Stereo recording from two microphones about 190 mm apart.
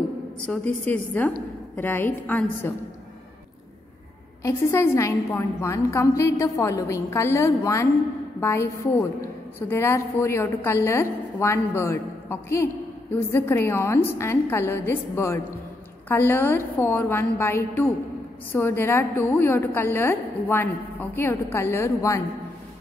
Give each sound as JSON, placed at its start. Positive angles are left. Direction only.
{"t": 0.5, "sound": "a woman's voice", "side_deg": 10}
{"t": 4.4, "sound": "a woman's voice", "side_deg": 15}